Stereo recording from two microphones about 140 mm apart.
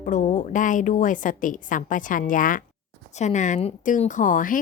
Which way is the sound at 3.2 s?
60° left (ahead or behind).